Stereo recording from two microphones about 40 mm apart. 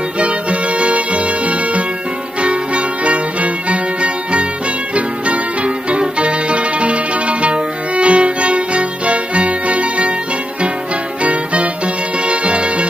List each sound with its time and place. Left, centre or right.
0.2 s music: right
11.2 s music: right